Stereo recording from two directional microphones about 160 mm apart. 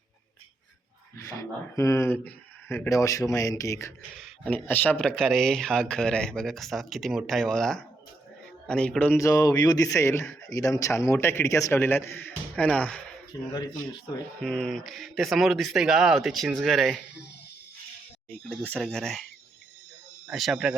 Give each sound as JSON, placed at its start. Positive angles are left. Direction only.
{"t": 1.1, "sound": "a man's voice", "side_deg": 20}
{"t": 14.4, "sound": "a man's voice", "side_deg": 5}
{"t": 18.3, "sound": "a man's voice", "side_deg": 10}
{"t": 20.2, "sound": "a man's voice", "side_deg": 0}